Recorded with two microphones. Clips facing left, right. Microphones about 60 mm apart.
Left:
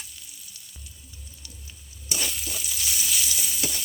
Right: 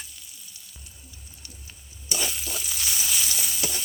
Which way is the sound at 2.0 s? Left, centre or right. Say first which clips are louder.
Right 1 dB; centre.